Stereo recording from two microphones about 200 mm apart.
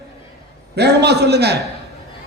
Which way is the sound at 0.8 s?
55° right (ahead or behind).